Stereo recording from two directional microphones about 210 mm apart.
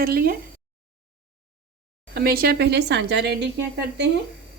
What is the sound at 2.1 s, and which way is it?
A woman's voice, 50° right (ahead or behind).